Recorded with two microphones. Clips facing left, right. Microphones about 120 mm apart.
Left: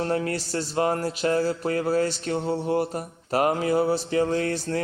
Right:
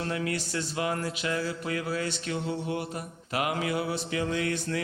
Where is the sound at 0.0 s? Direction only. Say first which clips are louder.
Left 5 dB; 40° left (ahead or behind).